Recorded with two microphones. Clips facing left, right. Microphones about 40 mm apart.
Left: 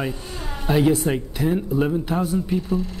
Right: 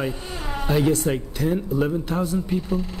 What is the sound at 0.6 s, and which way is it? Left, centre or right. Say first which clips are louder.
Speech: left 2 dB; centre.